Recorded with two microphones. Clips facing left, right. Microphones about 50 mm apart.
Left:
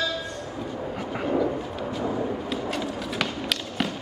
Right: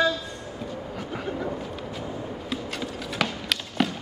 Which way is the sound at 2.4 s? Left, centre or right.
Centre.